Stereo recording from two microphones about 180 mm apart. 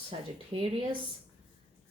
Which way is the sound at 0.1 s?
30° right (ahead or behind).